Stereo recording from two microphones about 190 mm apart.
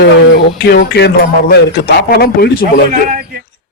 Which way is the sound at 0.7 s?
60° left (ahead or behind).